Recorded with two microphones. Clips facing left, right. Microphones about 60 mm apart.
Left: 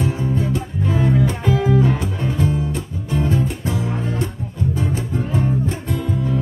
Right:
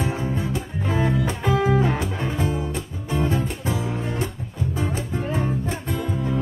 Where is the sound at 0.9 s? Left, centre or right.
Right.